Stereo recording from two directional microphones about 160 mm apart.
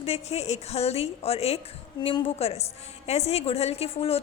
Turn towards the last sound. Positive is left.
turn(degrees=40)  # may be behind; listen again after turning